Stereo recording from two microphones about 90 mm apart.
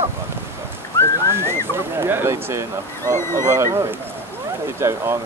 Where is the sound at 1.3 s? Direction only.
30° right (ahead or behind).